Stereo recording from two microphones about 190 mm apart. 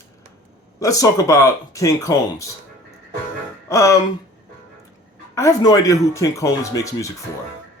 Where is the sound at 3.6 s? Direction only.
15° left (ahead or behind).